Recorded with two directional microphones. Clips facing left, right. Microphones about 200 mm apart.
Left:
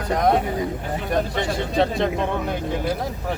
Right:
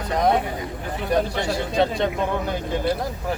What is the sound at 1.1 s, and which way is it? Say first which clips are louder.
Speech: right 1 dB; centre (ahead or behind).